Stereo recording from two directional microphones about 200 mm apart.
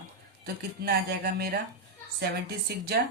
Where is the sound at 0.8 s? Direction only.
50° right (ahead or behind).